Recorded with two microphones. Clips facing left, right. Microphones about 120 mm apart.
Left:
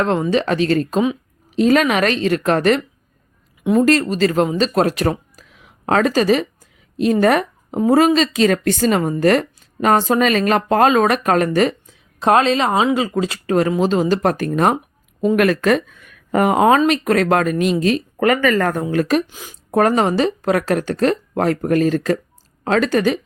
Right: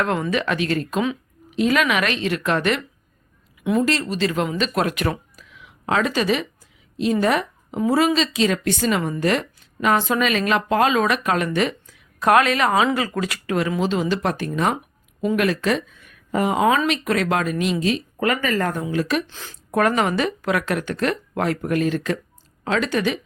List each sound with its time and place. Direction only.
0.0 s a woman's voice: 30° left (ahead or behind)
4.0 s speech: 40° left (ahead or behind)
11.9 s speech: 25° left (ahead or behind)
13.6 s speech: 40° left (ahead or behind)
18.3 s speech: 70° left (ahead or behind); by 19.1 s 55° left (ahead or behind)
19.3 s speech: 10° left (ahead or behind)
19.7 s a woman's voice: 30° left (ahead or behind)